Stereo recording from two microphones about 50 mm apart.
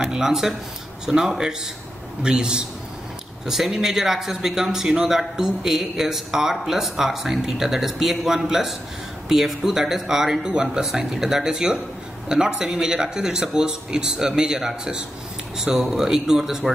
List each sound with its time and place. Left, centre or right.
0.1 s speech: centre